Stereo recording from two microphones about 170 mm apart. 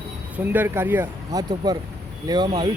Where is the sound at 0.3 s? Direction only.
10° right (ahead or behind).